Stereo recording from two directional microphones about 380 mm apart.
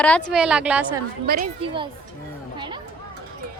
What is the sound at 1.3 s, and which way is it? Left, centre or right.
Speech, centre.